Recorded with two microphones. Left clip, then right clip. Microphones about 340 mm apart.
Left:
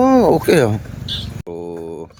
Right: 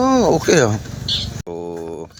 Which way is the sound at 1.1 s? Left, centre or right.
Left.